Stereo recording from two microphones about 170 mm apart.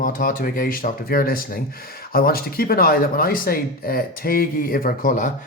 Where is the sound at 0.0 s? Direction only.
55° left (ahead or behind).